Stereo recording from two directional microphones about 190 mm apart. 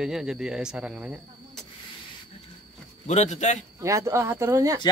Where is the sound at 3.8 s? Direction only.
15° right (ahead or behind).